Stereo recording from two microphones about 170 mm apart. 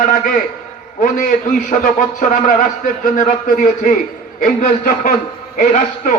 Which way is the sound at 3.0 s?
55° left (ahead or behind).